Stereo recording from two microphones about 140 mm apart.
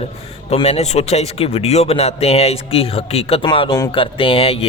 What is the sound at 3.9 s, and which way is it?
Speech, 40° left (ahead or behind).